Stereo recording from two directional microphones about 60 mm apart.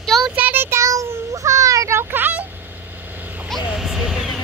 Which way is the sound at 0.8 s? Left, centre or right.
Right.